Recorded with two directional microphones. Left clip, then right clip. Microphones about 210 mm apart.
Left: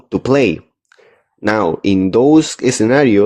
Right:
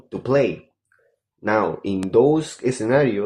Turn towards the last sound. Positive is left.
turn(degrees=45)  # may be behind; listen again after turning